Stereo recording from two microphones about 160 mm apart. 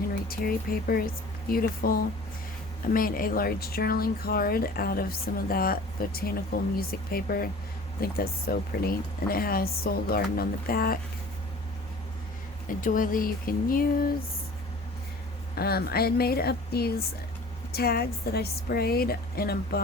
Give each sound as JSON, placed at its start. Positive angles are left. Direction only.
{"t": 0.3, "sound": "speech", "side_deg": 70}
{"t": 12.6, "sound": "speech", "side_deg": 55}
{"t": 15.5, "sound": "speech", "side_deg": 75}